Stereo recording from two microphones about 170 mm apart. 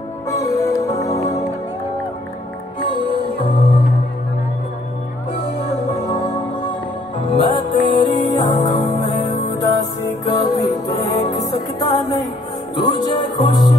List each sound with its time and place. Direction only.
0.3 s music: 20° left (ahead or behind)
3.1 s music: 35° left (ahead or behind)
6.1 s music: 35° left (ahead or behind)
9.6 s music: 20° left (ahead or behind)